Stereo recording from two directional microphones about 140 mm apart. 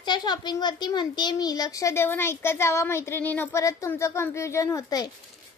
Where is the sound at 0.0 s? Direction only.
30° left (ahead or behind).